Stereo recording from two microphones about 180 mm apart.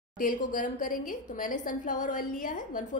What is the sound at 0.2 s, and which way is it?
A woman's voice, 50° left (ahead or behind).